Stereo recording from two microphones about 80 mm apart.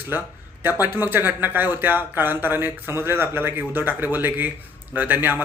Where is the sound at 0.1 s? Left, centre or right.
Right.